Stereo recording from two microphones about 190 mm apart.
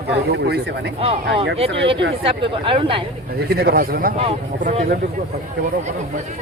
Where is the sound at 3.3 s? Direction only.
55° right (ahead or behind).